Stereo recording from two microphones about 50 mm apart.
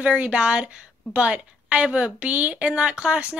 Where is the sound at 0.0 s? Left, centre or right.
Right.